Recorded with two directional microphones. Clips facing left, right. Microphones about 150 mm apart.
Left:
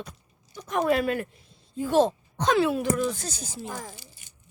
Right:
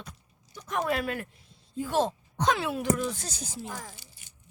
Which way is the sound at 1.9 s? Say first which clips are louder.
Left 6 dB; 10° right (ahead or behind).